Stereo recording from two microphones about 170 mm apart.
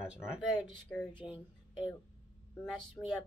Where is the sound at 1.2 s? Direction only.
25° left (ahead or behind).